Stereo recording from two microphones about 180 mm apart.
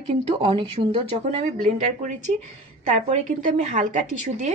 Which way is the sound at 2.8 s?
40° right (ahead or behind).